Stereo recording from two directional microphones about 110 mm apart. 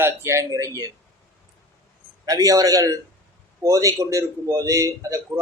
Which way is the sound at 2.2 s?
30° right (ahead or behind).